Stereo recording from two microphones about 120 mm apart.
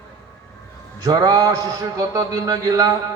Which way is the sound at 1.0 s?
30° right (ahead or behind).